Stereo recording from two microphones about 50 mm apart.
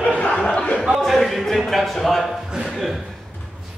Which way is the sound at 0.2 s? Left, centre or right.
Left.